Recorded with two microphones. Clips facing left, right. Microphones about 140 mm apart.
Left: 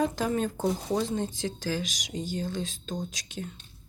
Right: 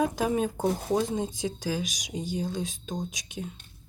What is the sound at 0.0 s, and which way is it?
Speech, 15° right (ahead or behind).